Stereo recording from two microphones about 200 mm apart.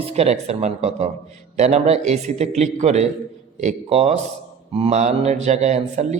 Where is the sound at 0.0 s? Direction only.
30° right (ahead or behind).